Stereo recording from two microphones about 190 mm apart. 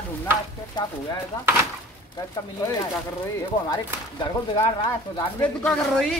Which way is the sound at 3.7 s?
25° left (ahead or behind).